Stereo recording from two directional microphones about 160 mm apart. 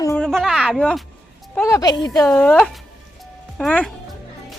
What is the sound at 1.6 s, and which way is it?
Speech, 20° left (ahead or behind).